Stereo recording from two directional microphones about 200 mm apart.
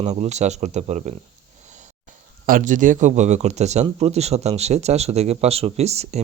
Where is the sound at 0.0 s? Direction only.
35° right (ahead or behind).